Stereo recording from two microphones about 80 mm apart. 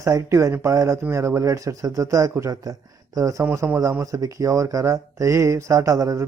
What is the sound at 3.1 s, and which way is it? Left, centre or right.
Speech, right.